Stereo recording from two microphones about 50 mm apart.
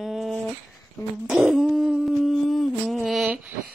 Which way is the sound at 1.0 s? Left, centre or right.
Left.